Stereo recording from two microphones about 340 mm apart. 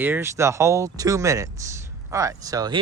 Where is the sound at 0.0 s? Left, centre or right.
Centre.